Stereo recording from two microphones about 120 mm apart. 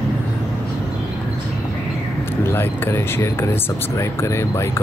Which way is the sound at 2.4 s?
20° left (ahead or behind).